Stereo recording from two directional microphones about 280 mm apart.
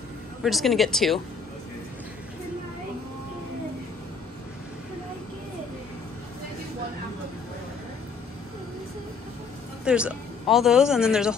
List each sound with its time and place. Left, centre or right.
0.4 s speech: centre
9.8 s speech: centre